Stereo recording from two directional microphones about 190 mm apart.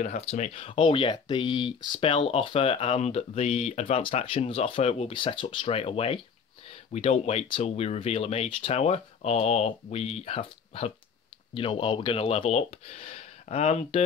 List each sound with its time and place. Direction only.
0.3 s speech: 35° left (ahead or behind)